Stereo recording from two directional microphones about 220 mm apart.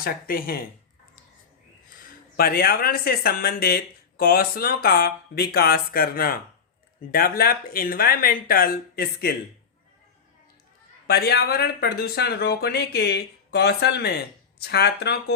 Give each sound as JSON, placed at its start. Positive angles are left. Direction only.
{"t": 0.0, "sound": "speech", "side_deg": 40}
{"t": 1.9, "sound": "speech", "side_deg": 45}
{"t": 11.0, "sound": "speech", "side_deg": 45}